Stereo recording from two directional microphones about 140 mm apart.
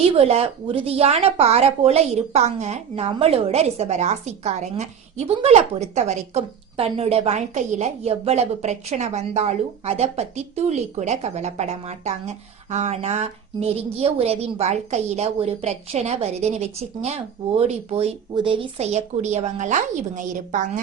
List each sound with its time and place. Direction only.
0.2 s a woman's voice: 45° right (ahead or behind)
18.9 s a woman's voice: 55° right (ahead or behind)